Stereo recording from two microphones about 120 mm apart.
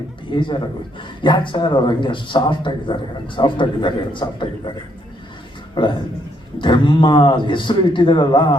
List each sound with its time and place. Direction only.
0.3 s a man's voice: 40° left (ahead or behind)
5.7 s a man's voice: 40° left (ahead or behind)